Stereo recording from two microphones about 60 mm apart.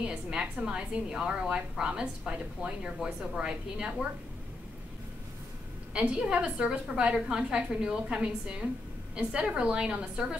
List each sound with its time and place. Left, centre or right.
0.0 s a woman's voice: centre
5.9 s a woman's voice: centre